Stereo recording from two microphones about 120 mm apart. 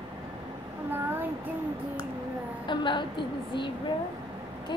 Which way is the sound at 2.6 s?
40° left (ahead or behind).